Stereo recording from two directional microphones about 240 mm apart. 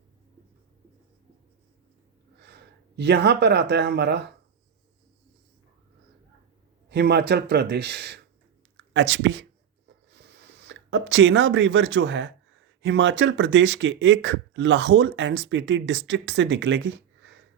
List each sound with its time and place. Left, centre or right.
2.4 s speech: right
6.9 s speech: right